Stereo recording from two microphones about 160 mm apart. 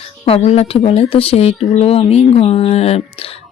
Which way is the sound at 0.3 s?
40° left (ahead or behind).